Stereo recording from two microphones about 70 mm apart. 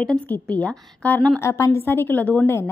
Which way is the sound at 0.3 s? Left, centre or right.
Centre.